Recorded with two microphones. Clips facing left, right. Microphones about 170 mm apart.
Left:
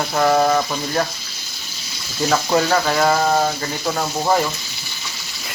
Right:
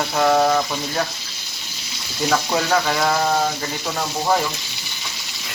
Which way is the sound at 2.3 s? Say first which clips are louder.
Left 2 dB; 5° left (ahead or behind).